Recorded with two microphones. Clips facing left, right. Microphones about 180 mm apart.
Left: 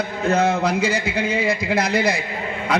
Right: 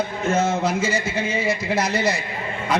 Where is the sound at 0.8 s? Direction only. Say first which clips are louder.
Left 2 dB; 15° left (ahead or behind).